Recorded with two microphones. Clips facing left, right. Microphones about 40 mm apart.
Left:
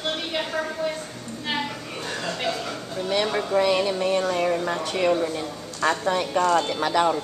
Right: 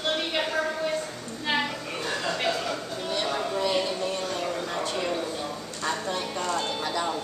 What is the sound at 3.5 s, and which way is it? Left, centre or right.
Music, left.